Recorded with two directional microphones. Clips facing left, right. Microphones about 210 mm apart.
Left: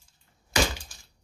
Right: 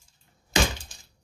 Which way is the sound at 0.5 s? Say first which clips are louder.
Right 1 dB; 20° right (ahead or behind).